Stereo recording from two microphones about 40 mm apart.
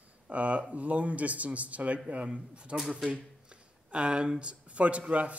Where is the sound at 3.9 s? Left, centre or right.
Right.